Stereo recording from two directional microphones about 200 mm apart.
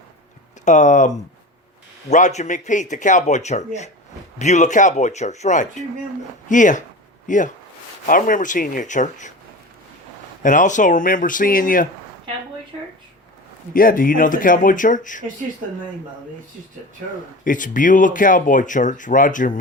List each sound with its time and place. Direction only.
0.6 s speech: 35° left (ahead or behind)
10.4 s speech: 40° left (ahead or behind)
13.7 s speech: 45° left (ahead or behind)
17.4 s speech: 40° left (ahead or behind)